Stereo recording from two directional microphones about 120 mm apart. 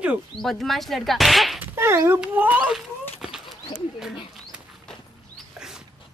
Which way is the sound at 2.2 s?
15° right (ahead or behind).